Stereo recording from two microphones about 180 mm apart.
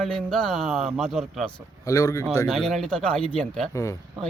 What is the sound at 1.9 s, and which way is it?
Speech, 15° left (ahead or behind).